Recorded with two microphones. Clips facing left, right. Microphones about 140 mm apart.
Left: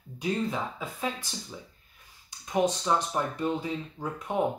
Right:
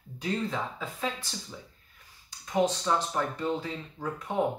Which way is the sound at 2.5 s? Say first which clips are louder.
Left 1 dB; 15° left (ahead or behind).